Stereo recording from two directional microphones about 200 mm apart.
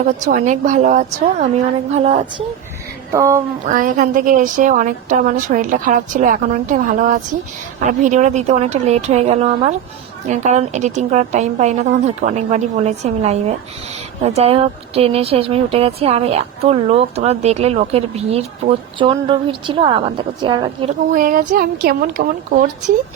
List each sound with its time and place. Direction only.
0.3 s speech: 40° right (ahead or behind)
3.1 s a woman's voice: 15° right (ahead or behind)
3.7 s speech: 40° right (ahead or behind); by 20.9 s 25° right (ahead or behind)
21.1 s a woman's voice: 45° right (ahead or behind)